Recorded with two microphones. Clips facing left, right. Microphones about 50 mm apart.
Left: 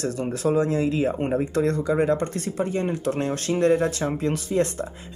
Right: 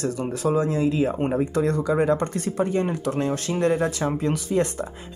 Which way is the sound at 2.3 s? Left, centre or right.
Right.